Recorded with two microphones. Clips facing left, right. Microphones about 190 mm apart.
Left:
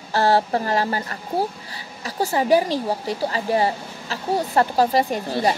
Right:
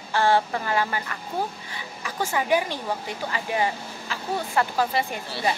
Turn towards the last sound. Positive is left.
turn(degrees=40)  # may be behind; listen again after turning